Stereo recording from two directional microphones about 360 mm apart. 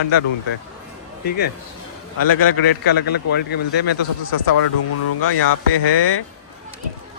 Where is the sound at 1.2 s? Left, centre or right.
Left.